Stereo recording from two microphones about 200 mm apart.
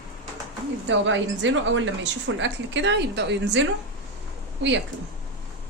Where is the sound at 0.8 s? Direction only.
70° right (ahead or behind).